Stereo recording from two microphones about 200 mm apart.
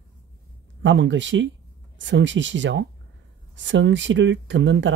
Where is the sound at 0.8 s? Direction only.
65° right (ahead or behind).